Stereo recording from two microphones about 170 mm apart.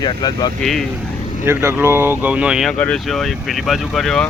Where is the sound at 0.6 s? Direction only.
Centre (ahead or behind).